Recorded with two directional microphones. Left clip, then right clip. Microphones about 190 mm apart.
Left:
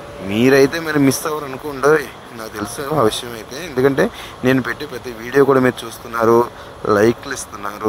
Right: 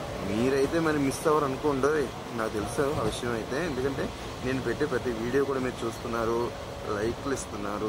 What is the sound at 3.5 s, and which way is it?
Speech, 30° left (ahead or behind).